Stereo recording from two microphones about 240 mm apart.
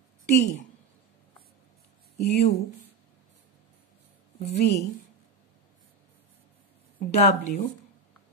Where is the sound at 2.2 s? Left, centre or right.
Left.